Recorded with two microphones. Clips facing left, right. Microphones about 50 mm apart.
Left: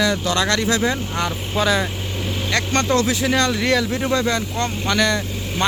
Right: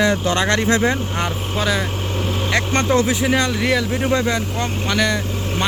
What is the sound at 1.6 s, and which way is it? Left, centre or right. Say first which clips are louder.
Speech: left 2 dB; centre.